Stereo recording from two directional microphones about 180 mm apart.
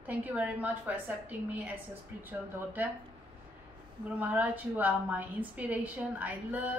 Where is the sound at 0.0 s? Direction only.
10° right (ahead or behind).